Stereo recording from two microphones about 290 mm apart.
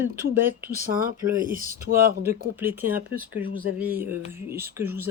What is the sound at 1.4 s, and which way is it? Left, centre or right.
Speech, right.